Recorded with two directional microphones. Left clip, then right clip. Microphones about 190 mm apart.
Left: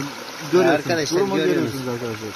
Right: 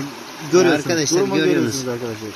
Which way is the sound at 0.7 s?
35° right (ahead or behind).